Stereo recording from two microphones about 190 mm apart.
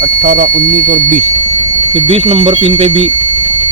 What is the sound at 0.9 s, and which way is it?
Speech, 45° right (ahead or behind).